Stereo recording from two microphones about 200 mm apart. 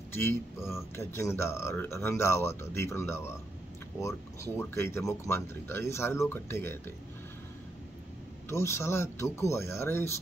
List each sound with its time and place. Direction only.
0.1 s speech: 10° left (ahead or behind)
4.6 s speech: 10° left (ahead or behind)
8.5 s speech: 15° left (ahead or behind)